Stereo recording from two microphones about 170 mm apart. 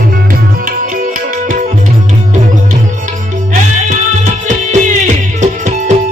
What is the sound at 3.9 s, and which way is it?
Music, 45° right (ahead or behind).